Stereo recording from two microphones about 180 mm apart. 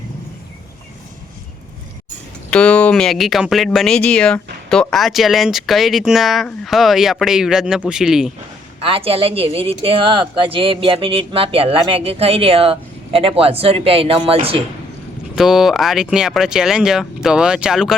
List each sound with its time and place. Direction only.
2.5 s speech: 5° left (ahead or behind)
8.8 s speech: 30° right (ahead or behind)
15.4 s speech: centre (ahead or behind)